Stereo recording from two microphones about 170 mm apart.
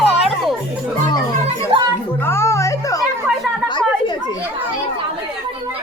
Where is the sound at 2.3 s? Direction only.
15° left (ahead or behind).